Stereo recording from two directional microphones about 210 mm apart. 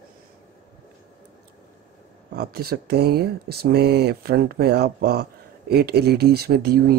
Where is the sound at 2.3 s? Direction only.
50° right (ahead or behind).